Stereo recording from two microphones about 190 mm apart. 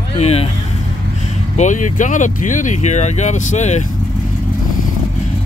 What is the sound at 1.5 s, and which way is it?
Speech, 40° left (ahead or behind).